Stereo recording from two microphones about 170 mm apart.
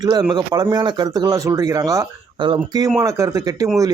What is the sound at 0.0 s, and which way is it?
Speech, 25° right (ahead or behind).